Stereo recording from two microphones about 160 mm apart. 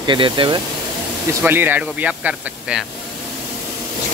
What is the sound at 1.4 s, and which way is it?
Speech, 10° right (ahead or behind).